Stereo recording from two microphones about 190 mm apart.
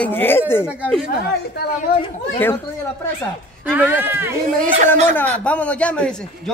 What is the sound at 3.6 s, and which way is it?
Speech, 10° right (ahead or behind).